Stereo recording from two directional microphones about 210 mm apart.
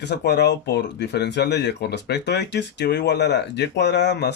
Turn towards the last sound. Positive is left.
turn(degrees=55)  # may be behind; listen again after turning